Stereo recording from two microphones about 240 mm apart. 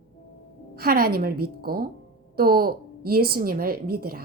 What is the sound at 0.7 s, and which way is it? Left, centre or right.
A woman's voice, right.